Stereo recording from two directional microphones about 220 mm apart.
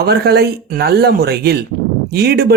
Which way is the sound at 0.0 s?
45° right (ahead or behind).